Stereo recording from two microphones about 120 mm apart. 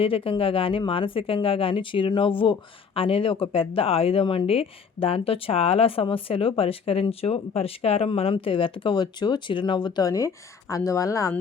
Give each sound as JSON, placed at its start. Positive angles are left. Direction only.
{"t": 0.0, "sound": "speech", "side_deg": 50}